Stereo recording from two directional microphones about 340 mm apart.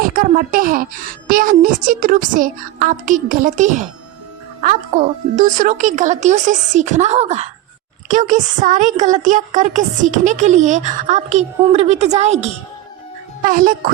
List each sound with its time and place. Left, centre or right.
0.0 s a woman's voice: right